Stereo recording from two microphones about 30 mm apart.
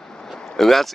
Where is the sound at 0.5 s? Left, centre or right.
Centre.